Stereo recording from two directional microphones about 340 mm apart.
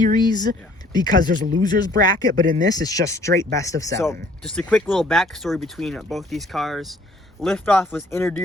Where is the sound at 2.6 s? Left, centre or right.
Centre.